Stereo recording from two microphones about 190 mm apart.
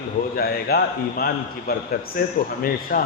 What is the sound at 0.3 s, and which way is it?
A man's voice, 55° left (ahead or behind).